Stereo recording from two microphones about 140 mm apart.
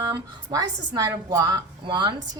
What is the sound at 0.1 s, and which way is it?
A woman's voice, 30° right (ahead or behind).